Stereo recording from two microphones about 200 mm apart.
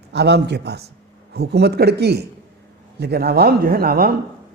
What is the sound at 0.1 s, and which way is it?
Speech, 55° right (ahead or behind).